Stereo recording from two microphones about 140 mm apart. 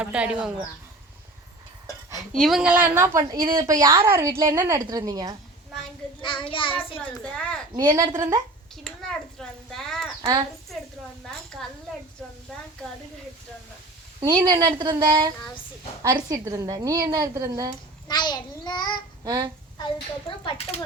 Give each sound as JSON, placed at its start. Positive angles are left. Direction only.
{"t": 0.0, "sound": "a woman's voice", "side_deg": -10}
{"t": 2.3, "sound": "a woman's voice", "side_deg": 0}
{"t": 6.2, "sound": "a child's voice", "side_deg": 35}
{"t": 7.3, "sound": "a woman's voice", "side_deg": 5}
{"t": 7.9, "sound": "a woman's voice", "side_deg": -25}
{"t": 8.7, "sound": "a child's voice", "side_deg": 5}
{"t": 14.2, "sound": "a woman's voice", "side_deg": -30}
{"t": 16.3, "sound": "a woman's voice", "side_deg": -25}
{"t": 18.1, "sound": "a child's voice", "side_deg": 30}
{"t": 19.2, "sound": "a sound", "side_deg": -30}
{"t": 20.4, "sound": "speech", "side_deg": 40}